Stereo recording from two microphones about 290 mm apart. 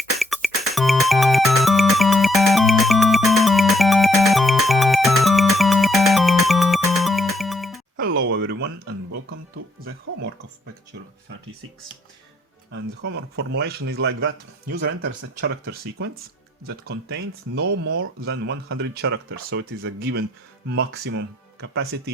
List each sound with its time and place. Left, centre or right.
0.2 s music: centre
8.3 s a sound: right
12.7 s a man's voice: right